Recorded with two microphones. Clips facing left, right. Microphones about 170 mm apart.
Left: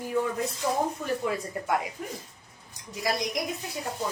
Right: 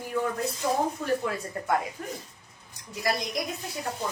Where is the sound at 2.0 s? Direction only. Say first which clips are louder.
Even; 10° left (ahead or behind).